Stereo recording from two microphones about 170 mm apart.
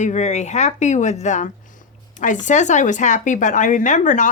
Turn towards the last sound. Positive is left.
turn(degrees=45)  # may be behind; listen again after turning